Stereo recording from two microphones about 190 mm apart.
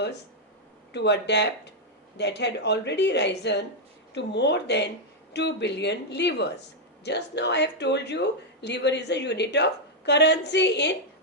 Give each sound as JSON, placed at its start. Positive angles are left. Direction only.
{"t": 0.9, "sound": "a woman's voice", "side_deg": 65}